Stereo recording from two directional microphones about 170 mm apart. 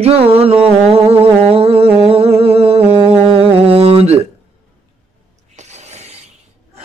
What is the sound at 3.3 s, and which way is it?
Mantra, 35° right (ahead or behind).